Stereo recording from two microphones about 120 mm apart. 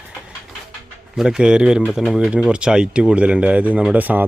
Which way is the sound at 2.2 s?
10° right (ahead or behind).